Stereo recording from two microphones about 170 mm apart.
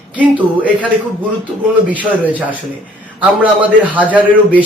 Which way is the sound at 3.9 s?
10° right (ahead or behind).